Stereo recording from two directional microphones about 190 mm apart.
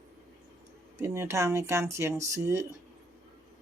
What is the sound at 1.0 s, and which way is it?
A woman's voice, 15° right (ahead or behind).